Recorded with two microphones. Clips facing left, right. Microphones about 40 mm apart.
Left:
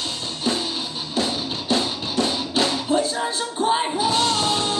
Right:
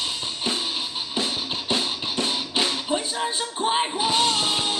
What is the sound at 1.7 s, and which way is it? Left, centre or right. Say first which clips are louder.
Music: left 3 dB; centre.